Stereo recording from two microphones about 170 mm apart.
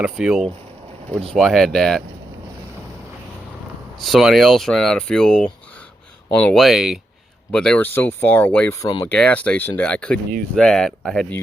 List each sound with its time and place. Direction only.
0.0 s speech: 5° right (ahead or behind)
4.0 s speech: centre (ahead or behind)
8.8 s speech: 30° left (ahead or behind)
9.0 s speech: 5° left (ahead or behind)